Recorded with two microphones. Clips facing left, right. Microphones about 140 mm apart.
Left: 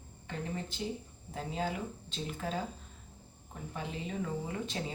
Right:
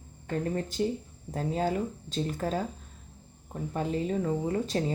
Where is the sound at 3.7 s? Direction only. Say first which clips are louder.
Right 9 dB; 40° right (ahead or behind).